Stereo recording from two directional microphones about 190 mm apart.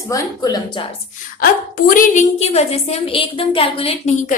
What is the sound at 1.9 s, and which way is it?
A woman's voice, 45° left (ahead or behind).